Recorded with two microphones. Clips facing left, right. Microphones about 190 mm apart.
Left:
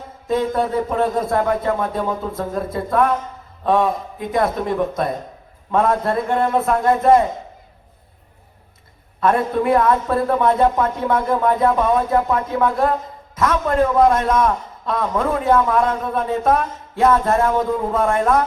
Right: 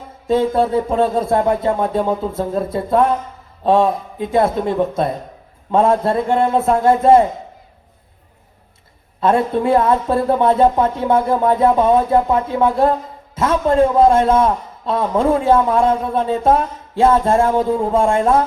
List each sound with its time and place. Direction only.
0.3 s a man's voice: 30° right (ahead or behind)
9.2 s a man's voice: 25° right (ahead or behind)